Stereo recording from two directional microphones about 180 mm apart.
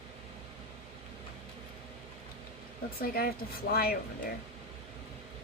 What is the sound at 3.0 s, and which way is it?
Speech, 55° left (ahead or behind).